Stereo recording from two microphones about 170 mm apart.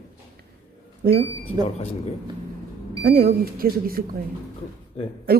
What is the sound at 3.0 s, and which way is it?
Speech, 65° right (ahead or behind).